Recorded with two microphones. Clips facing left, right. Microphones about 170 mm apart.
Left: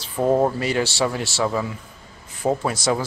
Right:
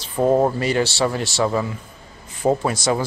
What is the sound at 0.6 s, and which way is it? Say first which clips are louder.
Speech: right 2 dB; 5° left (ahead or behind).